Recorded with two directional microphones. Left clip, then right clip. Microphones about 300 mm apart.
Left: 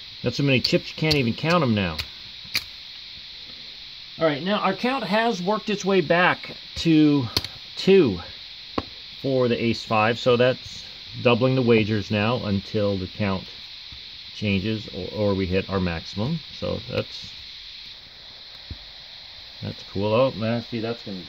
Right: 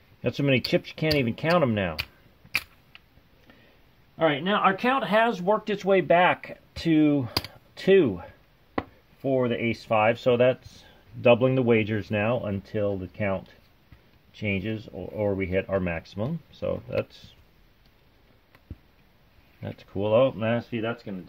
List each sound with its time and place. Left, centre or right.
0.2 s speech: centre
4.2 s speech: centre
7.3 s a sound: centre
7.8 s speech: centre
8.8 s chopping: centre
9.7 s speech: centre
14.4 s speech: centre
19.6 s speech: centre